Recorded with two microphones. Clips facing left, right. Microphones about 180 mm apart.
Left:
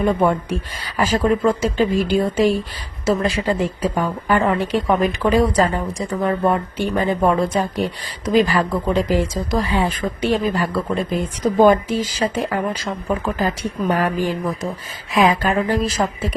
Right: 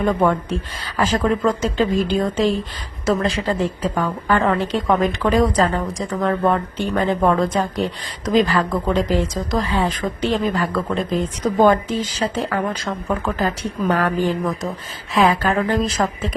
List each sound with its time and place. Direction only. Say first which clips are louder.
0.0 s speech: even; 10° left (ahead or behind)